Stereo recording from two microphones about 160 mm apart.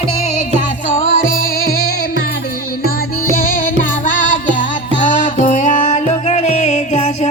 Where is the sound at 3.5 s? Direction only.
60° left (ahead or behind).